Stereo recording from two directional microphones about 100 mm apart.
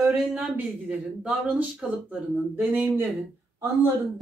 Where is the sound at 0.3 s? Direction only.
15° right (ahead or behind).